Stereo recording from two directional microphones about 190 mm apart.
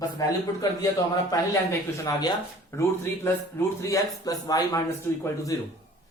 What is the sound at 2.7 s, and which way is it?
Speech, 15° left (ahead or behind).